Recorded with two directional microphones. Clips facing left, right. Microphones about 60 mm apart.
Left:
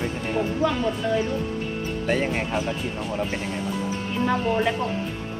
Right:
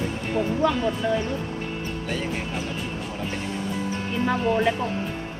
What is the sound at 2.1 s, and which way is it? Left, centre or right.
Speech, left.